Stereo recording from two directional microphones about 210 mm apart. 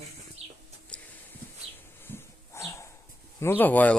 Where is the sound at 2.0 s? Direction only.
15° left (ahead or behind).